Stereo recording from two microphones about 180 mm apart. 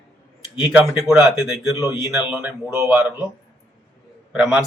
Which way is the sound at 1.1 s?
Centre (ahead or behind).